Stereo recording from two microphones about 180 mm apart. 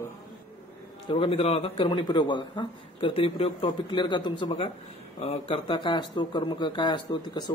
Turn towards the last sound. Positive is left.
turn(degrees=25)  # may be behind; listen again after turning